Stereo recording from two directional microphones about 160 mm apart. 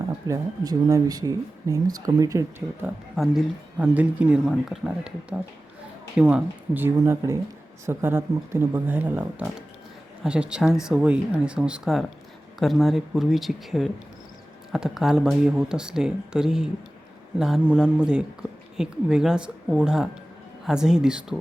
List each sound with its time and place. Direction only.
0.3 s speech: 20° right (ahead or behind)
3.2 s speech: 5° right (ahead or behind)